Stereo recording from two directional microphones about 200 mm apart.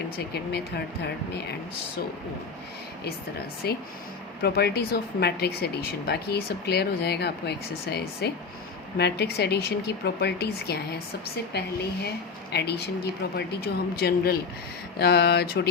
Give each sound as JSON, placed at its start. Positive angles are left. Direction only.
{"t": 0.2, "sound": "speech", "side_deg": 55}
{"t": 3.6, "sound": "speech", "side_deg": 50}